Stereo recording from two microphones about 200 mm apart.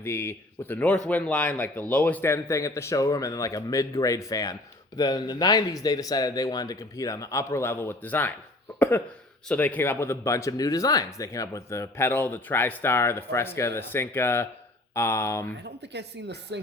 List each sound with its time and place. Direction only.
0.0 s speech: 10° left (ahead or behind)
9.5 s speech: 10° left (ahead or behind)
15.6 s speech: 60° right (ahead or behind)